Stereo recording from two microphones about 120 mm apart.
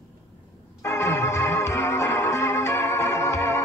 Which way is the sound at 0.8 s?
20° left (ahead or behind).